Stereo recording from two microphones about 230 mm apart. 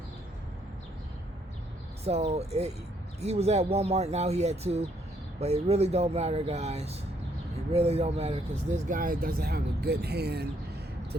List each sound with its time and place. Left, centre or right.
2.0 s speech: right